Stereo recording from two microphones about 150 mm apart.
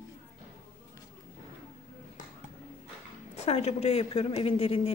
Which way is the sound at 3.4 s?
45° left (ahead or behind).